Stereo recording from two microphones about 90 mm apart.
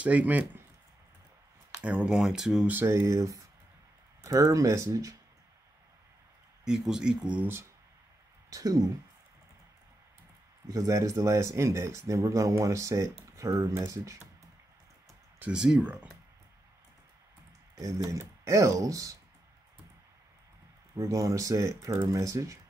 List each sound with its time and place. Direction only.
0.0 s speech: 15° right (ahead or behind)
1.8 s speech: 10° right (ahead or behind)
2.7 s speech: 25° right (ahead or behind)
3.0 s speech: 35° right (ahead or behind)
6.6 s speech: 10° right (ahead or behind)
8.5 s speech: 40° right (ahead or behind)
10.7 s speech: 40° right (ahead or behind)
15.5 s speech: 10° right (ahead or behind)
17.7 s speech: 40° right (ahead or behind)
20.9 s speech: 35° right (ahead or behind)